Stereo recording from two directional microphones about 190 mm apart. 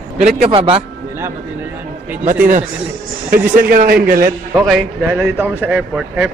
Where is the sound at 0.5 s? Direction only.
30° right (ahead or behind).